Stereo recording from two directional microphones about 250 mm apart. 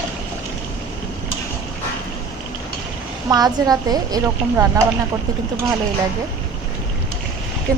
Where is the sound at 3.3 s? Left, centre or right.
Centre.